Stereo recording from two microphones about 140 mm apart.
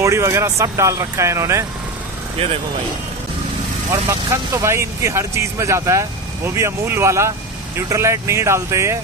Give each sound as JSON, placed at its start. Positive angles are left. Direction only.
{"t": 0.0, "sound": "speech", "side_deg": -20}
{"t": 3.9, "sound": "speech", "side_deg": -25}